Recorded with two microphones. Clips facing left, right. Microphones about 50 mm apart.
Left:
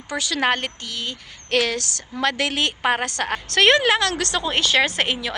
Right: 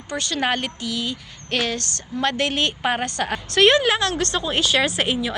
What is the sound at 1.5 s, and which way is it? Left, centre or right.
Female singing, left.